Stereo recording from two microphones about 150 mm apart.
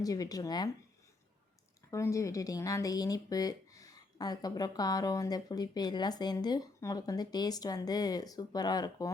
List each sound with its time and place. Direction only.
0.0 s speech: 25° left (ahead or behind)
1.9 s speech: 20° left (ahead or behind)